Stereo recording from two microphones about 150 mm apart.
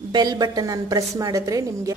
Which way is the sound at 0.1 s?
25° right (ahead or behind).